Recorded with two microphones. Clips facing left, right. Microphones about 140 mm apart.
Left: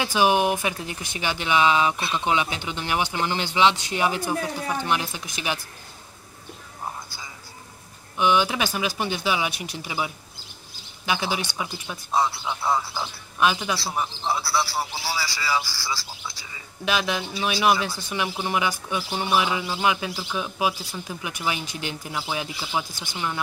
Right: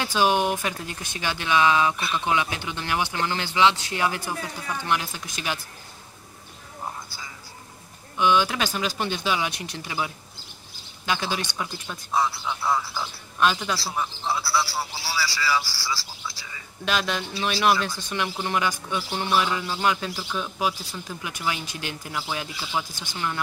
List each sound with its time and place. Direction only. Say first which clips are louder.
0.0 s speech: left 2 dB; 15° left (ahead or behind)
8.2 s speech: even; 15° left (ahead or behind)
12.1 s speech: left 1 dB; 25° left (ahead or behind)
16.8 s speech: left 1 dB; 10° left (ahead or behind)